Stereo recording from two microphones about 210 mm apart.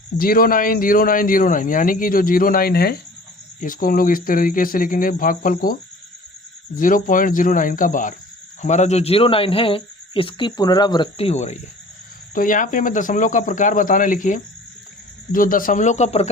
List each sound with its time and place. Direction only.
0.2 s speech: 45° left (ahead or behind)
6.7 s speech: 40° left (ahead or behind)